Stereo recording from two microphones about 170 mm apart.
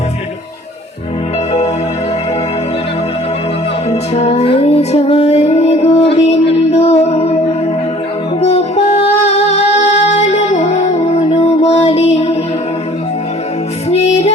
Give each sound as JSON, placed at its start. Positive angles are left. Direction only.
{"t": 3.8, "sound": "music", "side_deg": 40}
{"t": 8.4, "sound": "music", "side_deg": 40}